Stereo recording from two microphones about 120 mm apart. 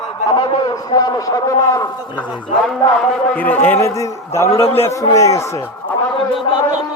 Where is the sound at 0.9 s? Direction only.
40° left (ahead or behind).